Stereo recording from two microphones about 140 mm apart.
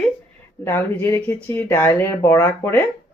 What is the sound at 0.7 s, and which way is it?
Speech, 15° left (ahead or behind).